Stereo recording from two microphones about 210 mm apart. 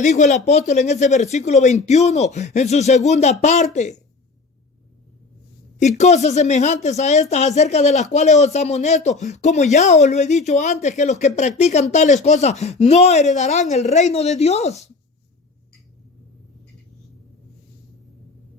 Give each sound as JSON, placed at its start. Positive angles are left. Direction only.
{"t": 0.0, "sound": "speech", "side_deg": 35}
{"t": 6.0, "sound": "speech", "side_deg": 35}